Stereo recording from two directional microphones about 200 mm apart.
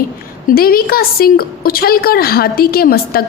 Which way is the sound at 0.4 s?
50° left (ahead or behind).